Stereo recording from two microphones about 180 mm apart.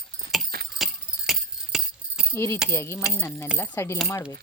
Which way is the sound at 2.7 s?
15° left (ahead or behind).